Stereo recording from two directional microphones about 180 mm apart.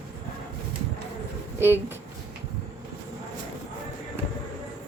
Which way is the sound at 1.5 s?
10° right (ahead or behind).